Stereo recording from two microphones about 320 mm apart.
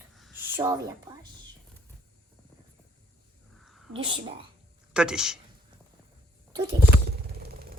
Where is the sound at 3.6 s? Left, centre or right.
Centre.